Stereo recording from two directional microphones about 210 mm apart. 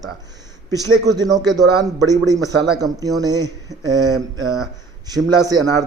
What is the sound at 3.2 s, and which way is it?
Speech, 20° right (ahead or behind).